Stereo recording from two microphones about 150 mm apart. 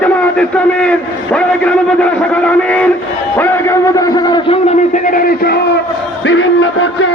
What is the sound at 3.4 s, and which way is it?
A man's voice, 15° left (ahead or behind).